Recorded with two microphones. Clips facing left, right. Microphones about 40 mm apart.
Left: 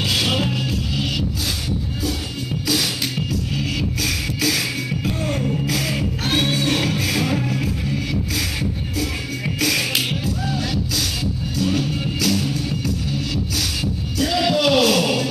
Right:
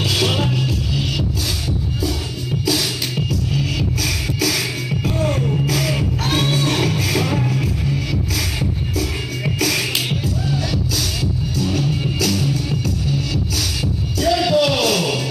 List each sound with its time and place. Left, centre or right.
0.2 s music: centre
5.7 s music: left
10.2 s music: left
14.3 s a sound: left